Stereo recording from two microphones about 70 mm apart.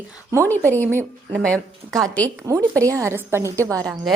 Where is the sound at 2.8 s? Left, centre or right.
Right.